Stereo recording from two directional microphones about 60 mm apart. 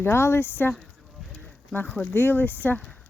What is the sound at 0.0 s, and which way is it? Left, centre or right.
Speech, left.